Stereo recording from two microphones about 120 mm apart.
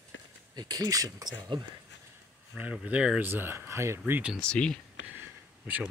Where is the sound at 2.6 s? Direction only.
10° right (ahead or behind).